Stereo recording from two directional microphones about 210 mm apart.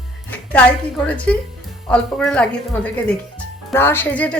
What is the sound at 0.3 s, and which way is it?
A woman's voice, 5° left (ahead or behind).